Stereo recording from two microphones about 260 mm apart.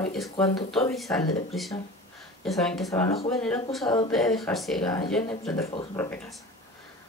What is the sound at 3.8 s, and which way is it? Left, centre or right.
Speech, centre.